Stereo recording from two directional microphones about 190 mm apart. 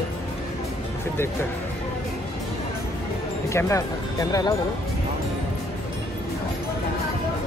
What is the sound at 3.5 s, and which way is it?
Speech, 15° left (ahead or behind).